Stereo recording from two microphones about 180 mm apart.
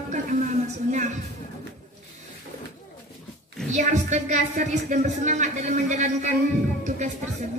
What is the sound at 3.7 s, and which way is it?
A woman's voice, 40° right (ahead or behind).